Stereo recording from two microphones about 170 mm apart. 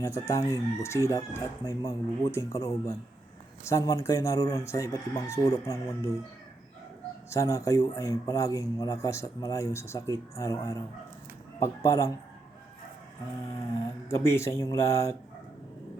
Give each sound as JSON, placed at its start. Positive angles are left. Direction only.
{"t": 0.0, "sound": "a man's voice", "side_deg": 20}
{"t": 7.3, "sound": "a man's voice", "side_deg": 15}
{"t": 14.1, "sound": "speech", "side_deg": 15}